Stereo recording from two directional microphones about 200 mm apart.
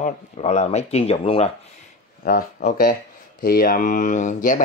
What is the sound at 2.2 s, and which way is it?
Speech, 45° left (ahead or behind).